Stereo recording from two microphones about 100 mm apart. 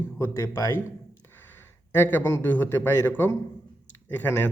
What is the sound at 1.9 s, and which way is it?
A man's voice, 20° left (ahead or behind).